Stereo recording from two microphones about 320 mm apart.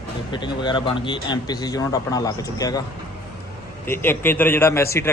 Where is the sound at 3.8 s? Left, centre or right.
Centre.